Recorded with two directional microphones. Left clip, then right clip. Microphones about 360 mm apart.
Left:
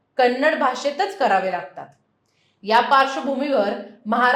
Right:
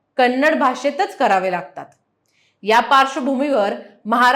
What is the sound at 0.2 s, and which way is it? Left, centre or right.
A woman's voice, right.